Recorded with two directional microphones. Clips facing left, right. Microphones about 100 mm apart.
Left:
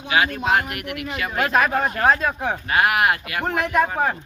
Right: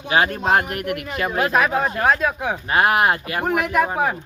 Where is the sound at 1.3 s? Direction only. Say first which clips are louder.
Right 1 dB; 5° right (ahead or behind).